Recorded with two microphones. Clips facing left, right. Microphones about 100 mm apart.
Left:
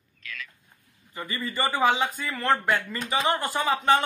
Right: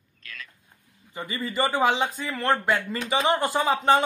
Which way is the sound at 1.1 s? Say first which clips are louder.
Right 2 dB; 25° right (ahead or behind).